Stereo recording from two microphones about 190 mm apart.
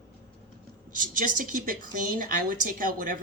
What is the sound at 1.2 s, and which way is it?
A woman's voice, 45° right (ahead or behind).